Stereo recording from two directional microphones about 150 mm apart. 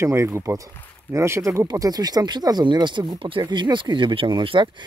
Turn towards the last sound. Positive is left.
turn(degrees=-35)  # may be behind; listen again after turning